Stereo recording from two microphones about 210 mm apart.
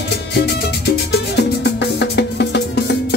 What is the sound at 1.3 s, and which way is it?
Music, 55° left (ahead or behind).